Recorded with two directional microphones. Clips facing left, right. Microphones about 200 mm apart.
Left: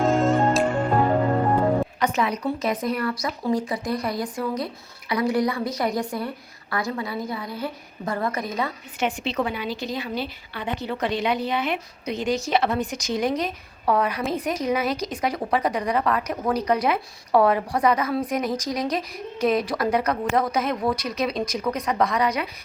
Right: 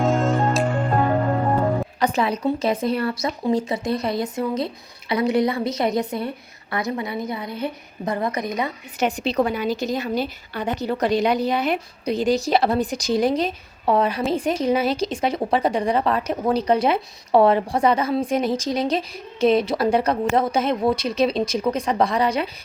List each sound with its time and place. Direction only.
0.0 s music: centre (ahead or behind)
2.0 s a woman's voice: 30° right (ahead or behind); by 8.7 s 15° right (ahead or behind)
9.0 s a woman's voice: 40° right (ahead or behind)